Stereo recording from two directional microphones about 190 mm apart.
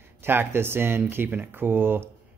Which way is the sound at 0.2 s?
10° right (ahead or behind).